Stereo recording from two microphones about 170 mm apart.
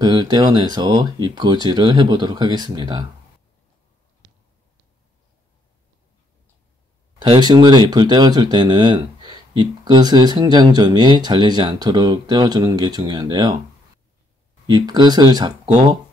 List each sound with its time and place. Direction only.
0.0 s speech: 25° right (ahead or behind)
7.2 s speech: 25° right (ahead or behind)
14.7 s speech: 25° right (ahead or behind)